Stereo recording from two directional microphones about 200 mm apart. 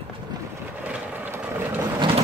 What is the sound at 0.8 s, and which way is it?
Vehicle, 10° right (ahead or behind).